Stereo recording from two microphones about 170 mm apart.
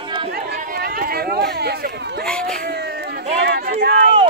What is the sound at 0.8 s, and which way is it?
Speech, 65° right (ahead or behind).